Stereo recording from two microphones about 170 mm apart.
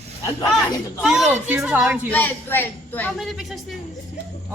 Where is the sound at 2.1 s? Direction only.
10° left (ahead or behind).